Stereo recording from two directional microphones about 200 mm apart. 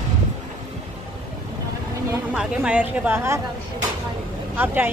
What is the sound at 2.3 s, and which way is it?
A woman's voice, 5° right (ahead or behind).